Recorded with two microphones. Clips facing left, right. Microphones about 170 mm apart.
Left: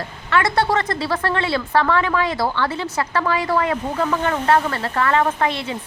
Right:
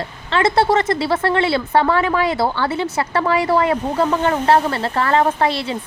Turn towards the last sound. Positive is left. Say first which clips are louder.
# right 2 dB
turn(degrees=-35)  # may be behind; listen again after turning